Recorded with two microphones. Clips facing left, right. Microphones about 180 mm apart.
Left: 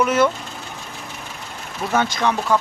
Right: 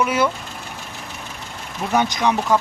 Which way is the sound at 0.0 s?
10° right (ahead or behind).